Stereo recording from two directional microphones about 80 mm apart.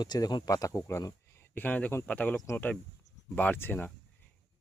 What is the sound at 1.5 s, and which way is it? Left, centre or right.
Speech, left.